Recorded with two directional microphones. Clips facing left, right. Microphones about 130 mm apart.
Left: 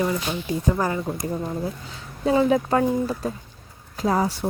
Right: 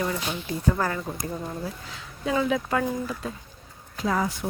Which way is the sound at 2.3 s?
35° left (ahead or behind).